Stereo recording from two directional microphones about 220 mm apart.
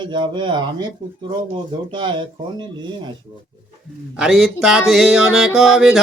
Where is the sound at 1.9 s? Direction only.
20° right (ahead or behind).